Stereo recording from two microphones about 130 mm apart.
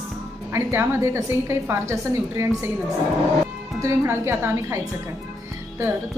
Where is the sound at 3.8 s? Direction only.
20° right (ahead or behind).